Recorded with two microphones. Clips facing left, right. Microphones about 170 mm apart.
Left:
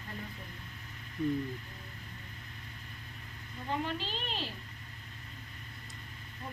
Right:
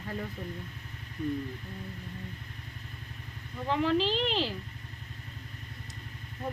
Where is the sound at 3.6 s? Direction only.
90° right.